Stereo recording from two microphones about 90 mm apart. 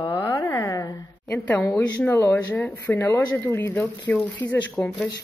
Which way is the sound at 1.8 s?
15° left (ahead or behind).